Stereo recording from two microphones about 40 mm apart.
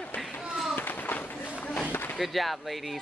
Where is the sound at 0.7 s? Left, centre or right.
Left.